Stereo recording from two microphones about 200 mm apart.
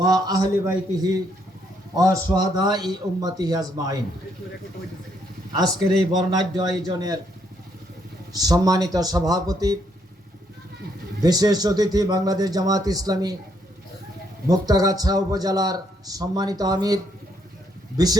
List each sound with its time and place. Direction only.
0.0 s a man's voice: 20° right (ahead or behind)
5.5 s a man's voice: 20° right (ahead or behind)
8.3 s a man's voice: 20° right (ahead or behind)
11.2 s a man's voice: 20° right (ahead or behind)
14.4 s a man's voice: 20° right (ahead or behind)